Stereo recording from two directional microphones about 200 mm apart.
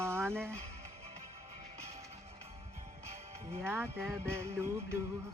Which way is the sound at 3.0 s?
30° right (ahead or behind).